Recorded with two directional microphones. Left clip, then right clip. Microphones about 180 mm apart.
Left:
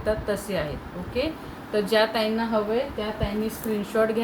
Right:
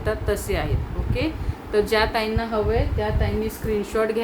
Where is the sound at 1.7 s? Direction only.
45° right (ahead or behind).